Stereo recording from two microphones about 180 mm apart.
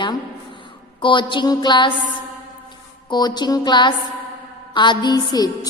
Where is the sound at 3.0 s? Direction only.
25° left (ahead or behind).